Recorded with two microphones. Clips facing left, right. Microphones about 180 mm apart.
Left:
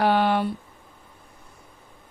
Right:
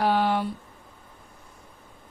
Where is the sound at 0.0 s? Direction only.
70° left (ahead or behind).